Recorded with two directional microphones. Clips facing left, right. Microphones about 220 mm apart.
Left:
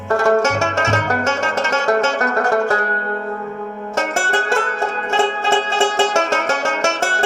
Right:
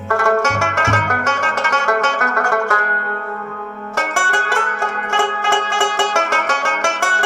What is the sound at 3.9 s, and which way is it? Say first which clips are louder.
Music: left 2 dB; 25° left (ahead or behind).